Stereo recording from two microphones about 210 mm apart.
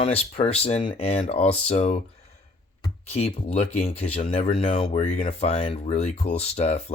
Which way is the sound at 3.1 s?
30° left (ahead or behind).